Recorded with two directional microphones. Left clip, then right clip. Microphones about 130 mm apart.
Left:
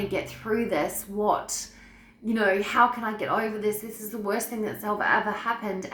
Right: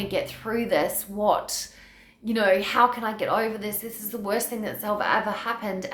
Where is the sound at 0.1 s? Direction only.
20° right (ahead or behind).